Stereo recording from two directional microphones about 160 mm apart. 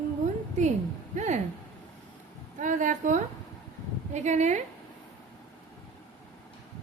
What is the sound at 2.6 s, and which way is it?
Speech, 55° right (ahead or behind).